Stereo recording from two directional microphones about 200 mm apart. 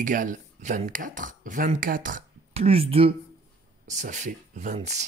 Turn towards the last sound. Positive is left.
turn(degrees=-35)  # may be behind; listen again after turning